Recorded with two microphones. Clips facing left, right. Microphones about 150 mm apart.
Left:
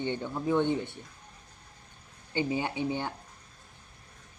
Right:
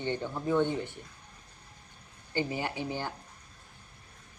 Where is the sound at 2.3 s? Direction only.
20° left (ahead or behind).